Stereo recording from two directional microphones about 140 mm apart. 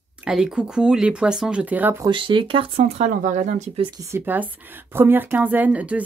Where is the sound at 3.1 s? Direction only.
65° right (ahead or behind).